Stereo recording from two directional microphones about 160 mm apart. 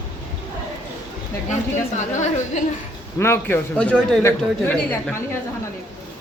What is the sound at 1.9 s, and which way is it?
Speech, 50° left (ahead or behind).